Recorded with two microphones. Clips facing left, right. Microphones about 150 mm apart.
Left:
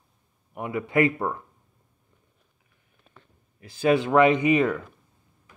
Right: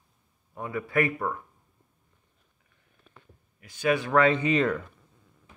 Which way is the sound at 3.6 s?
30° left (ahead or behind).